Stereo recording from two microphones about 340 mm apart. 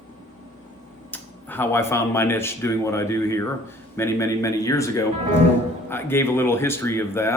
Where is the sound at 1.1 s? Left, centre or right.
Centre.